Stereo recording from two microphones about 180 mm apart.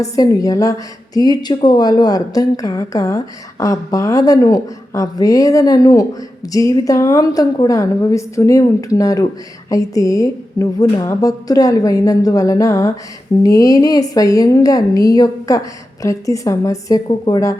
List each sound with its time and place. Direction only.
0.0 s a woman's voice: 20° left (ahead or behind)